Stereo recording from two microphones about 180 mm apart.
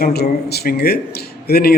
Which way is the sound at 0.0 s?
65° left (ahead or behind).